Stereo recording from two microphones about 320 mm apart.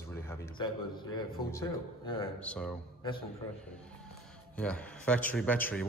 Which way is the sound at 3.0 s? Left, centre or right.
Centre.